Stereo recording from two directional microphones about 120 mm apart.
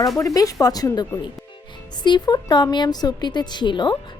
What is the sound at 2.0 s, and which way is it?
A woman's voice, 35° left (ahead or behind).